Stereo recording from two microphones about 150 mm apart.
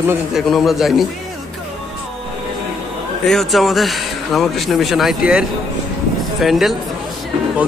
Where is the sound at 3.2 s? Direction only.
Centre (ahead or behind).